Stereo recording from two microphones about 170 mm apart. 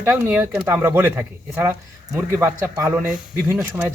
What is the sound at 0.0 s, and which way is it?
Speech, 10° right (ahead or behind).